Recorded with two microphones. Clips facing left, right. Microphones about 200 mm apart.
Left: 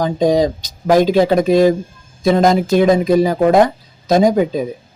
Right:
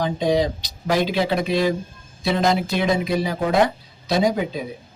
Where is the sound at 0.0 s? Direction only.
45° left (ahead or behind).